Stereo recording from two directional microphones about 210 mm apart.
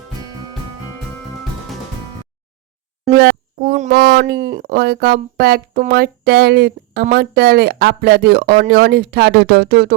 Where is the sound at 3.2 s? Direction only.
45° right (ahead or behind).